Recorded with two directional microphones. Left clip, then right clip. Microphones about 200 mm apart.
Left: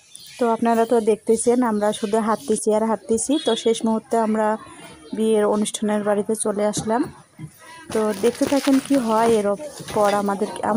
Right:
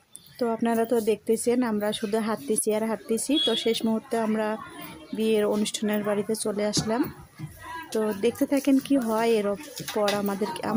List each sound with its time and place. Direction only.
0.3 s speech: 15° left (ahead or behind)
7.9 s speech: 5° left (ahead or behind)